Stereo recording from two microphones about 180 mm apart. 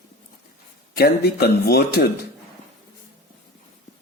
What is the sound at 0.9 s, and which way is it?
A man's voice, 60° left (ahead or behind).